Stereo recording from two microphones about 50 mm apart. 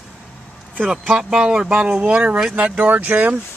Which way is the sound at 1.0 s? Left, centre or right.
Centre.